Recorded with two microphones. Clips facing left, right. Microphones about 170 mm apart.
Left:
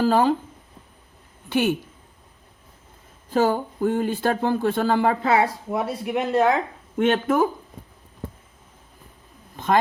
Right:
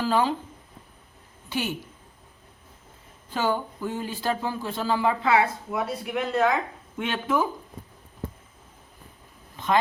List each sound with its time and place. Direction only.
0.0 s speech: 45° left (ahead or behind)
1.5 s a woman's voice: 60° left (ahead or behind)
3.2 s speech: 40° left (ahead or behind)
5.2 s speech: 40° left (ahead or behind)
5.7 s speech: 25° left (ahead or behind)
6.9 s speech: 45° left (ahead or behind)